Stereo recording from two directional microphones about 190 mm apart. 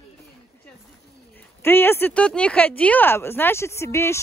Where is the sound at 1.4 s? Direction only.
10° left (ahead or behind).